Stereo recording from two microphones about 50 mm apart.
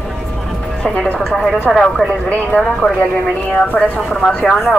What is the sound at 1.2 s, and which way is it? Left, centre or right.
Speech, centre.